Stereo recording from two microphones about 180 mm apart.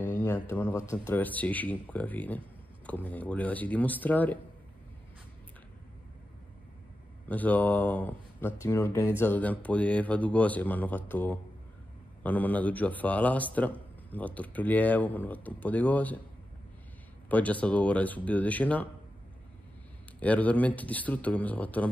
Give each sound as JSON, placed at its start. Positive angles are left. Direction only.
{"t": 0.1, "sound": "a sound", "side_deg": 15}
{"t": 0.7, "sound": "speech", "side_deg": 15}
{"t": 7.2, "sound": "speech", "side_deg": 10}
{"t": 17.3, "sound": "speech", "side_deg": 10}
{"t": 20.2, "sound": "speech", "side_deg": 10}